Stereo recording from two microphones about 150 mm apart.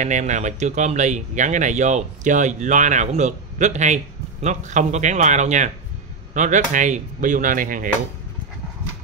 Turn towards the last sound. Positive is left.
turn(degrees=-65)  # may be behind; listen again after turning